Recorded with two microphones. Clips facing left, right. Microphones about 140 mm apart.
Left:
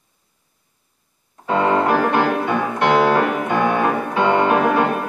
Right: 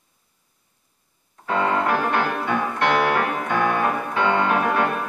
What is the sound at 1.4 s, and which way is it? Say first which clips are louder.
Music: left 4 dB; 25° left (ahead or behind).